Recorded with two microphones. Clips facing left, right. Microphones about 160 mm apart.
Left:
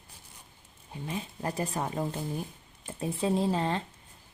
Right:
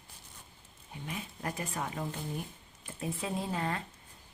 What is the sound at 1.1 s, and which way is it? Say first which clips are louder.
A woman's voice: left 4 dB; 30° left (ahead or behind).